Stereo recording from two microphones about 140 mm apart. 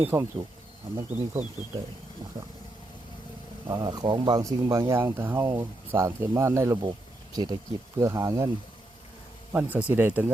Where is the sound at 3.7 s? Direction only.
30° right (ahead or behind).